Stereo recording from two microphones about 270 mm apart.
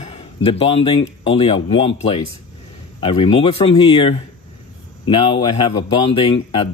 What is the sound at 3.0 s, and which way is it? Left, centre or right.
Speech, centre.